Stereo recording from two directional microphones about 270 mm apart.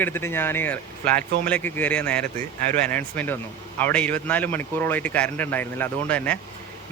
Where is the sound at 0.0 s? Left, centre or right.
Centre.